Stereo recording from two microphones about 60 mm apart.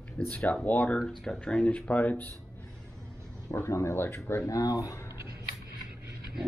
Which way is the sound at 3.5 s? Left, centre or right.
Left.